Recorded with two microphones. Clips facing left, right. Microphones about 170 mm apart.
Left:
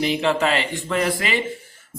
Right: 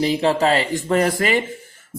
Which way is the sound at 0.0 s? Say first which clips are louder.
Right 3 dB; 35° right (ahead or behind).